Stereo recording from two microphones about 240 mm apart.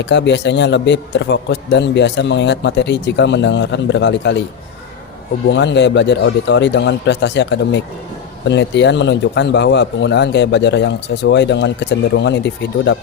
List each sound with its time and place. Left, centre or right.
0.0 s speech: left
5.5 s speech: left